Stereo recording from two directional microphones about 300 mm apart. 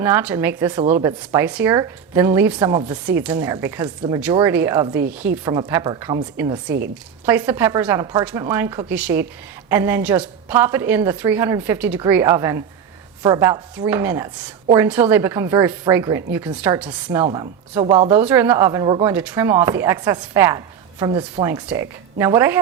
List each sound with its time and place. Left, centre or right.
0.0 s a woman's voice: centre
0.8 s speech: right
1.0 s a woman's voice: centre
18.2 s a woman's voice: centre